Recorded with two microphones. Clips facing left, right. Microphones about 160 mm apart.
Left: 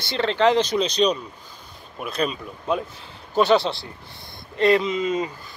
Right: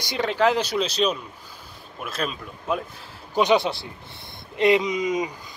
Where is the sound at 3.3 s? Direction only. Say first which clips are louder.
Left 1 dB; 15° right (ahead or behind).